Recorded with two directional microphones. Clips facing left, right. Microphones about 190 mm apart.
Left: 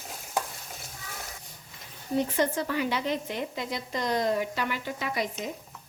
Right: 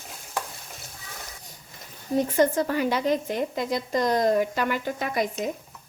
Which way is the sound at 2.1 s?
45° right (ahead or behind).